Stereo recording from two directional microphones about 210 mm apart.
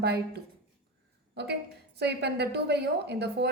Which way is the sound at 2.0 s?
50° right (ahead or behind).